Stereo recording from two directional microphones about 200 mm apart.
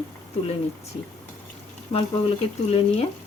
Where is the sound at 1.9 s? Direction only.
30° left (ahead or behind).